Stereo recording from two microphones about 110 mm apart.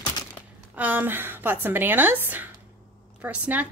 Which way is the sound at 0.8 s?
15° right (ahead or behind).